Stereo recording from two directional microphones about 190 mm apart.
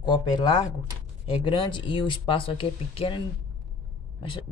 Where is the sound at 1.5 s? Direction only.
25° left (ahead or behind).